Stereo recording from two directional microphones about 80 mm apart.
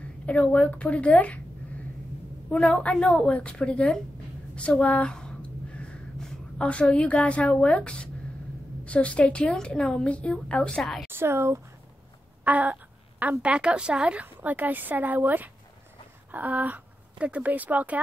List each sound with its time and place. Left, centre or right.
0.3 s a woman's voice: centre
2.5 s a woman's voice: centre
11.1 s speech: right
12.4 s a sound: centre
13.4 s a woman's voice: centre